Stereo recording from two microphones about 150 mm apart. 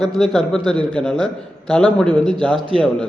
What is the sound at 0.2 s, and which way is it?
A man's voice, 5° left (ahead or behind).